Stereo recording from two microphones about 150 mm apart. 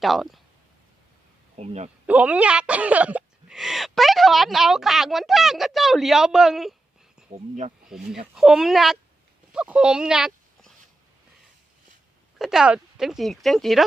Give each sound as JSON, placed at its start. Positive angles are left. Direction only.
{"t": 0.0, "sound": "speech", "side_deg": 0}
{"t": 1.5, "sound": "a man's voice", "side_deg": -45}
{"t": 2.0, "sound": "speech", "side_deg": -10}
{"t": 7.3, "sound": "a man's voice", "side_deg": -50}
{"t": 7.9, "sound": "speech", "side_deg": -5}
{"t": 12.4, "sound": "speech", "side_deg": -5}